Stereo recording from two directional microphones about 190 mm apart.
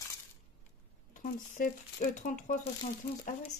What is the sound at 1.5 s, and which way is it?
Speech, 40° left (ahead or behind).